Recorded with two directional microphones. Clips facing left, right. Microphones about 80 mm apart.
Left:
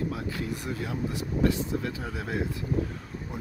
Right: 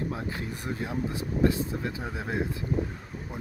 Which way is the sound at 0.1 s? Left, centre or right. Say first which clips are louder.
Left 1 dB; right.